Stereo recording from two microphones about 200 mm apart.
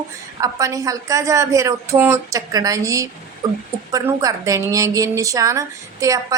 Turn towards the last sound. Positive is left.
turn(degrees=-15)  # may be behind; listen again after turning